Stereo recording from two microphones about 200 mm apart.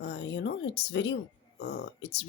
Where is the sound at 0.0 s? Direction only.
60° left (ahead or behind).